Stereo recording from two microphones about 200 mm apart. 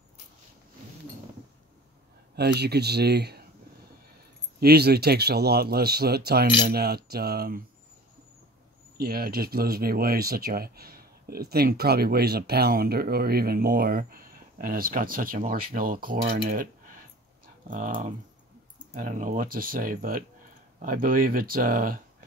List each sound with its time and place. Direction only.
2.3 s speech: 55° right (ahead or behind)
4.6 s speech: 50° right (ahead or behind)
8.9 s speech: 50° right (ahead or behind)